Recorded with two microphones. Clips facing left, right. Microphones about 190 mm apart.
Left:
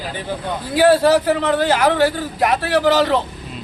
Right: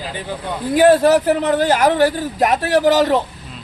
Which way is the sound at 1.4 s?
45° right (ahead or behind).